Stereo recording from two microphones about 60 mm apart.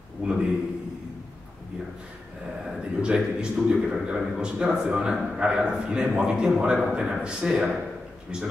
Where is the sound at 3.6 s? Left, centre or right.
Centre.